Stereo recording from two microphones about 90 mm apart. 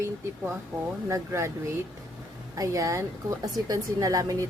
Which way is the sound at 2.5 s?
40° right (ahead or behind).